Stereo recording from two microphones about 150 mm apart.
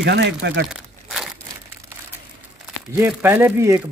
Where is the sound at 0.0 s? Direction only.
90° right.